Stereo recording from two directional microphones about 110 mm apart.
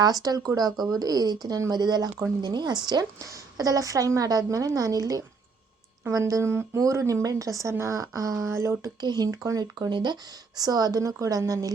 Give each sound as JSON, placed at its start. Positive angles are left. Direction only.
{"t": 0.0, "sound": "a woman's voice", "side_deg": -35}
{"t": 9.0, "sound": "a woman's voice", "side_deg": -40}